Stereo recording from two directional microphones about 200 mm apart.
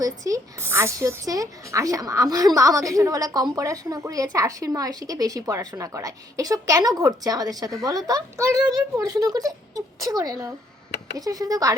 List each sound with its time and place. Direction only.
0.0 s a woman's voice: 15° right (ahead or behind)